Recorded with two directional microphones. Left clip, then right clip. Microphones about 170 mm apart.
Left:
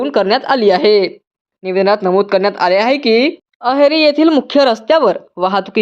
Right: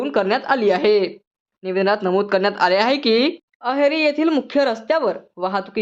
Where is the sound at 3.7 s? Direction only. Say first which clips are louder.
Left 7 dB; 25° left (ahead or behind).